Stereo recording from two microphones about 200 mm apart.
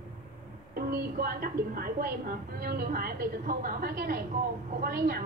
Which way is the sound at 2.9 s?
45° right (ahead or behind).